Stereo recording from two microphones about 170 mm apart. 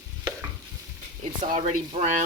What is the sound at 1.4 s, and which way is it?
Speech, 35° right (ahead or behind).